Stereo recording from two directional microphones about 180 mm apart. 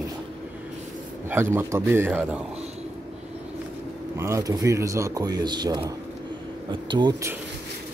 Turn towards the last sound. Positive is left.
turn(degrees=-20)  # may be behind; listen again after turning